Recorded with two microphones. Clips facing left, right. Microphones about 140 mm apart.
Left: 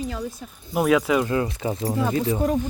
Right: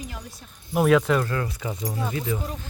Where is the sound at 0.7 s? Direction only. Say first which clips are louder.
Even; centre (ahead or behind).